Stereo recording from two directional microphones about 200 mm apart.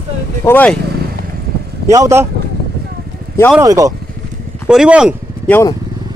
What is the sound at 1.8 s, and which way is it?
Speech, 15° right (ahead or behind).